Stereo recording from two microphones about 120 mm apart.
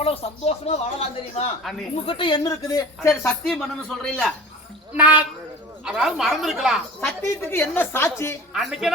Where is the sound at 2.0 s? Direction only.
45° left (ahead or behind); by 3.3 s 25° left (ahead or behind).